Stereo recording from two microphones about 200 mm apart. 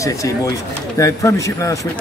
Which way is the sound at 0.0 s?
15° left (ahead or behind).